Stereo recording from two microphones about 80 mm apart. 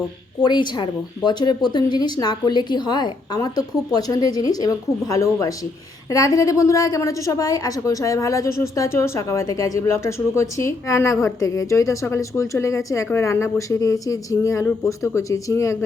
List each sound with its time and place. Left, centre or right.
0.4 s a woman's voice: left
13.1 s a woman's voice: left